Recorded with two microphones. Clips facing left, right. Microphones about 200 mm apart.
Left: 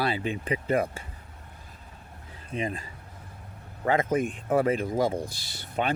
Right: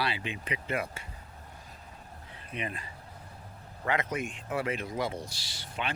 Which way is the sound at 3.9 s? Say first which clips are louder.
Left 7 dB; 45° left (ahead or behind).